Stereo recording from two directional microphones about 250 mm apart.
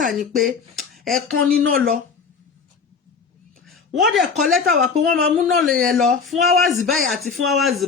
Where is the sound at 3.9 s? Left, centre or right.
Centre.